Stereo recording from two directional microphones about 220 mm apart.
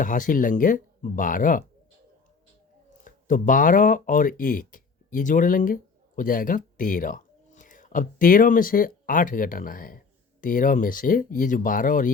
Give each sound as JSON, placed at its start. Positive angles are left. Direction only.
{"t": 0.0, "sound": "speech", "side_deg": 35}
{"t": 3.0, "sound": "speech", "side_deg": 35}